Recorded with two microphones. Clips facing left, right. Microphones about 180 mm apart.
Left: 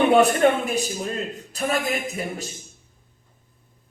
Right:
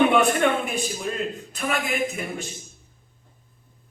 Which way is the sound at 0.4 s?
40° left (ahead or behind).